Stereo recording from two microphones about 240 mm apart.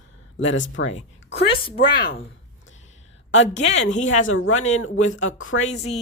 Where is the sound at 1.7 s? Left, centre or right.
Left.